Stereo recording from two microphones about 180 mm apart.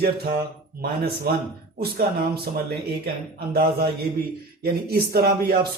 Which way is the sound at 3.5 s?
60° right (ahead or behind).